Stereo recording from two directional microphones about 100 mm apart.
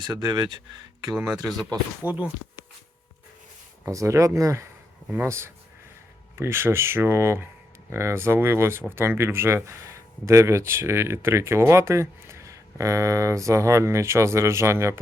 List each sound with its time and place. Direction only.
0.0 s speech: 45° right (ahead or behind)
2.0 s speech: 35° left (ahead or behind)
3.8 s speech: 30° right (ahead or behind)